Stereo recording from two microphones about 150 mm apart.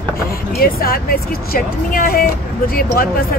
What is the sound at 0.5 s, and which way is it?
Speech, 90° left.